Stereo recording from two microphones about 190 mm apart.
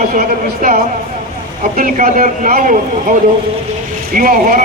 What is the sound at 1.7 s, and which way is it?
A man's voice, 45° right (ahead or behind).